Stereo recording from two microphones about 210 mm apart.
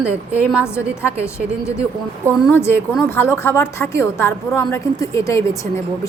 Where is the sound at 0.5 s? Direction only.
10° left (ahead or behind).